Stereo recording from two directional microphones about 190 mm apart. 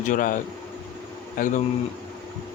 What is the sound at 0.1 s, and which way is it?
Speech, 45° left (ahead or behind).